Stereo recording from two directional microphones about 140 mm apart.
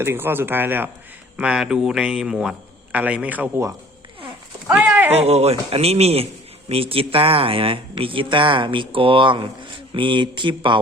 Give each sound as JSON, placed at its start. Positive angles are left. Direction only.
{"t": 0.0, "sound": "a man's voice", "side_deg": -15}
{"t": 5.1, "sound": "speech", "side_deg": -50}